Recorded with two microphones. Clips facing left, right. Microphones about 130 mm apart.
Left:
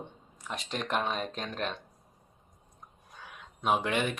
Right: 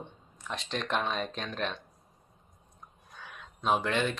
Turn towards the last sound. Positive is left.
turn(degrees=15)  # may be behind; listen again after turning